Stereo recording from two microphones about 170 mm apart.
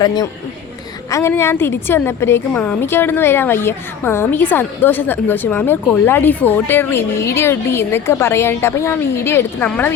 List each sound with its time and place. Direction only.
0.0 s a woman's voice: 25° left (ahead or behind)